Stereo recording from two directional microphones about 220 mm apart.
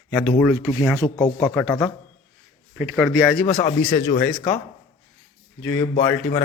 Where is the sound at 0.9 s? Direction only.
15° left (ahead or behind).